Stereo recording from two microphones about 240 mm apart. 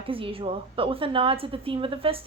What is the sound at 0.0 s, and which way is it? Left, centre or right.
A woman's voice, right.